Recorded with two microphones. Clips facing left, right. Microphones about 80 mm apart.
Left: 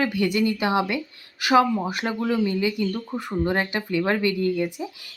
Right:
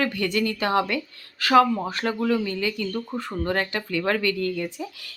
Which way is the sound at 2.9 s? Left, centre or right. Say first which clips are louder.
Even; centre.